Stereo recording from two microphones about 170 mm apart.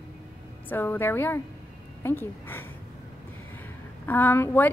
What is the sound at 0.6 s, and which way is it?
A woman's voice, 10° left (ahead or behind).